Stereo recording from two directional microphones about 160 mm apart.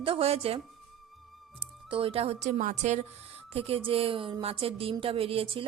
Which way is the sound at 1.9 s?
35° right (ahead or behind).